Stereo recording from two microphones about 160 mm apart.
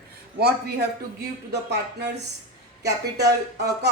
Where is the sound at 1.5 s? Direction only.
90° right.